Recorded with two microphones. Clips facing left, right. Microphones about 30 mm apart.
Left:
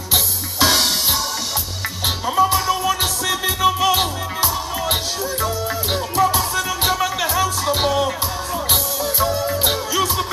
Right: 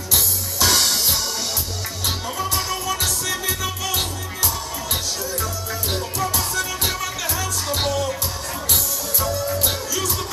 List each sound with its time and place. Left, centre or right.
0.1 s music: left
0.7 s music: centre
9.2 s music: left